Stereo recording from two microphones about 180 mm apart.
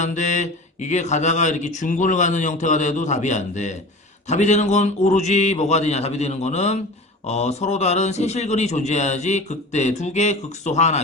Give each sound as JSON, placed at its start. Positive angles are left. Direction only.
{"t": 0.0, "sound": "a man's voice", "side_deg": 40}